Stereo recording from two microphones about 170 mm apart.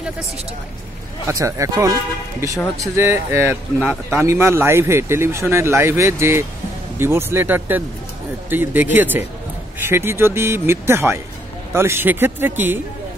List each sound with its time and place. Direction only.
1.2 s a man's voice: 20° right (ahead or behind)